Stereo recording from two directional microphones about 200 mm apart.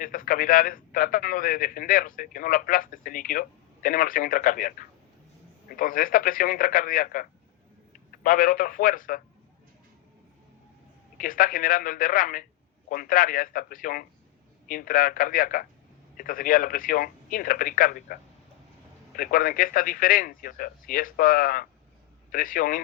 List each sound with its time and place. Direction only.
0.0 s a man's voice: 45° left (ahead or behind)
11.2 s a man's voice: 45° left (ahead or behind)